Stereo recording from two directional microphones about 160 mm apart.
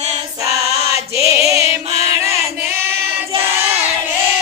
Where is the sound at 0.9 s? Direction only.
20° right (ahead or behind).